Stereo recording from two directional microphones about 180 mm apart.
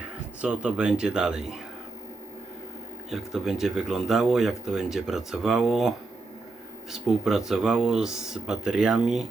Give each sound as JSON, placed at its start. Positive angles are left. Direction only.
{"t": 0.4, "sound": "speech", "side_deg": -5}
{"t": 3.1, "sound": "speech", "side_deg": 0}
{"t": 6.9, "sound": "speech", "side_deg": 0}